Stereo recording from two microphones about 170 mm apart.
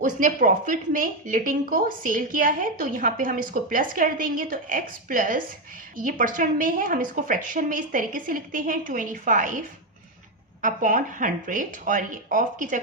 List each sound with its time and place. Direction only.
0.0 s speech: 50° right (ahead or behind)